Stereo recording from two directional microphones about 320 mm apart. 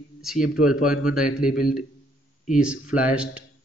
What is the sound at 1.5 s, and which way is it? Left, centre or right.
Speech, left.